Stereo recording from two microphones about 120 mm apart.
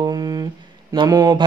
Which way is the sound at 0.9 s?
35° right (ahead or behind).